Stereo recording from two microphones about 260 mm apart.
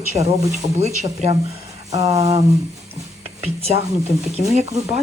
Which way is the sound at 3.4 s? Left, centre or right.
Right.